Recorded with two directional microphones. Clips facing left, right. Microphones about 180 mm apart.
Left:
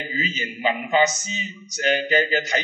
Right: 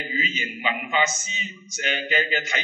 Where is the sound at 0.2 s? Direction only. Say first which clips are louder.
Left 6 dB; 35° left (ahead or behind).